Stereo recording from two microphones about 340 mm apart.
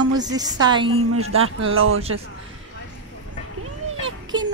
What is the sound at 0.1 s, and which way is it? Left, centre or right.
Speech, centre.